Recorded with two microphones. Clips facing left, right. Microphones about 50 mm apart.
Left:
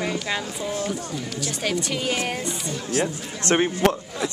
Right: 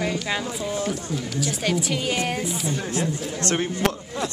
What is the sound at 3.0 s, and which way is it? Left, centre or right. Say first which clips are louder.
Speech: even; left.